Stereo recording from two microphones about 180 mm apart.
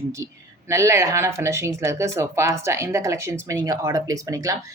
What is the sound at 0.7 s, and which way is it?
A woman's voice, 15° right (ahead or behind).